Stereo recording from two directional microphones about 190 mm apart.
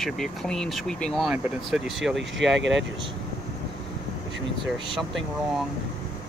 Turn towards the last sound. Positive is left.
turn(degrees=0)  # may be behind; listen again after turning